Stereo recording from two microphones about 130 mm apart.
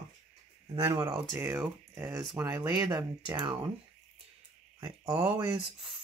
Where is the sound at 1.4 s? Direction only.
20° right (ahead or behind); by 3.7 s 40° right (ahead or behind).